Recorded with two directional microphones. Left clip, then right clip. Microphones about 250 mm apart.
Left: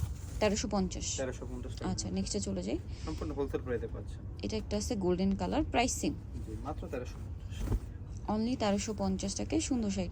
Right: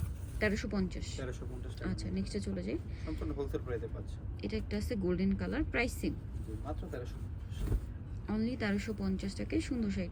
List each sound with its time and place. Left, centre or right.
0.3 s speech: centre
8.3 s speech: centre